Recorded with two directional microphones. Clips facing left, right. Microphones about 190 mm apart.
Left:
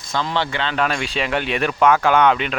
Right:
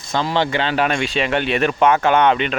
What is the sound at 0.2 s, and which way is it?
Speech, 15° right (ahead or behind).